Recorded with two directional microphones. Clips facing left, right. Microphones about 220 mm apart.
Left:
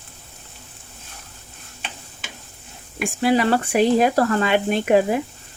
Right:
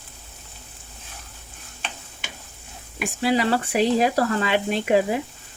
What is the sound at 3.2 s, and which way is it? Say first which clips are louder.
Speech: left 3 dB; 50° left (ahead or behind).